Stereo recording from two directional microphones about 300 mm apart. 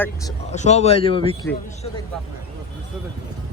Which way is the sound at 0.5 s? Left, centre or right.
Left.